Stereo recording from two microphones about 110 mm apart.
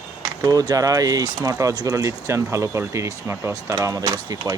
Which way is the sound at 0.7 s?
35° right (ahead or behind).